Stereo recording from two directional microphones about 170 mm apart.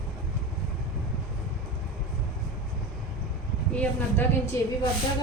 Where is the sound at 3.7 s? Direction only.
10° left (ahead or behind).